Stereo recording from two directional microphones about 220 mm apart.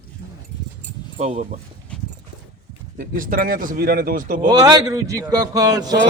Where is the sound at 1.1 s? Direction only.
30° right (ahead or behind).